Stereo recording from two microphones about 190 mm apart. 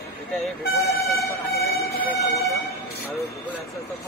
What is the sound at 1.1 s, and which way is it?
Vehicle, 55° left (ahead or behind).